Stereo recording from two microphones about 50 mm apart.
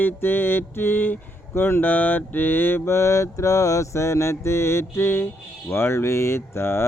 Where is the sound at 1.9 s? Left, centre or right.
Left.